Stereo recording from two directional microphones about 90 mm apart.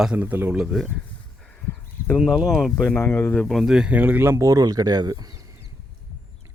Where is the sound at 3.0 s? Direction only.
25° left (ahead or behind).